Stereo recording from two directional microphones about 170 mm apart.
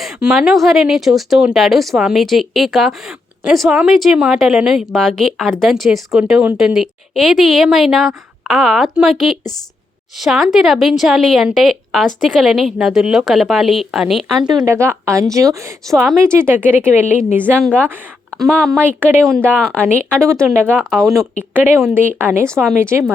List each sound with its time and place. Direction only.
0.0 s a woman's voice: centre (ahead or behind)
14.4 s a woman's voice: 25° right (ahead or behind)
17.6 s a woman's voice: 5° left (ahead or behind)
19.5 s speech: 5° right (ahead or behind)
20.1 s a woman's voice: 5° left (ahead or behind)
20.4 s speech: 15° right (ahead or behind)
20.9 s a woman's voice: 5° left (ahead or behind)
21.9 s speech: 10° right (ahead or behind)